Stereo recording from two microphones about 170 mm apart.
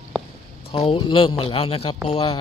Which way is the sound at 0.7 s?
35° left (ahead or behind).